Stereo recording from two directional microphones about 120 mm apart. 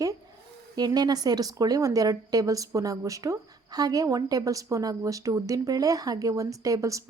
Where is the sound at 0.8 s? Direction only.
35° right (ahead or behind).